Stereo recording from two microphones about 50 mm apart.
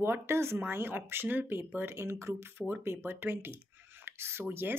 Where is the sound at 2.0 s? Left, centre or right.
Right.